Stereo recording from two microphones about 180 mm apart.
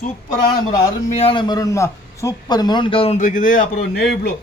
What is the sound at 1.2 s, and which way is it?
A man's voice, 30° left (ahead or behind).